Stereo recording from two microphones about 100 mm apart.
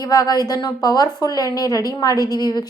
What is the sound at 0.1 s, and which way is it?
A woman's voice, 40° left (ahead or behind).